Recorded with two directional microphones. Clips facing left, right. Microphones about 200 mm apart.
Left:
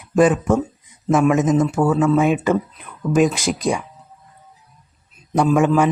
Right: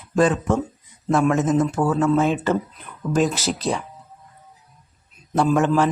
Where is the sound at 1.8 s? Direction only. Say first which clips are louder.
Left 3 dB; 5° left (ahead or behind).